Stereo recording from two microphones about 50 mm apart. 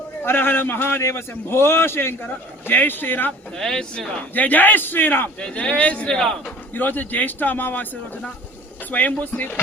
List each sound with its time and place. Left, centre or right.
0.3 s a man's voice: left
3.6 s speech: centre
4.4 s speech: left
5.4 s speech: left
6.1 s speech: centre
6.4 s speech: left